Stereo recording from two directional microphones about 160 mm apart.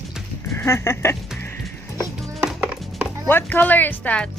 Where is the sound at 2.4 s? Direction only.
5° right (ahead or behind).